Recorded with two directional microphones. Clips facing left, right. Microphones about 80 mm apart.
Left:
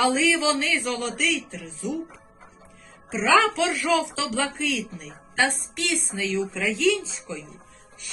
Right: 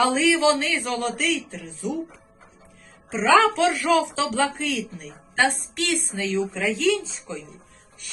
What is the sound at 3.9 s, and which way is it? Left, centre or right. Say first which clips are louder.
Speech: right 3 dB; right.